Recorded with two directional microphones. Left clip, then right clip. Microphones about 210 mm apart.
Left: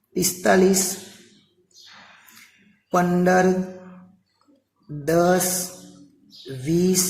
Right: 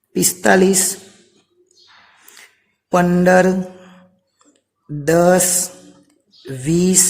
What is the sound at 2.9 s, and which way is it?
Speech, 55° right (ahead or behind).